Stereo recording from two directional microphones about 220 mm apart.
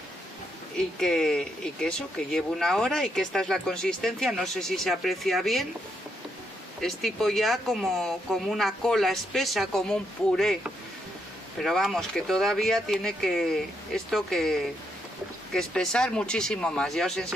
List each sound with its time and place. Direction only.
0.7 s speech: centre (ahead or behind)
6.8 s speech: centre (ahead or behind)